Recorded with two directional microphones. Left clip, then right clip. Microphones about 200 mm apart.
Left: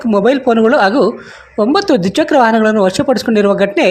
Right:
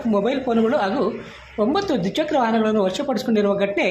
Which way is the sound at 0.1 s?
40° left (ahead or behind).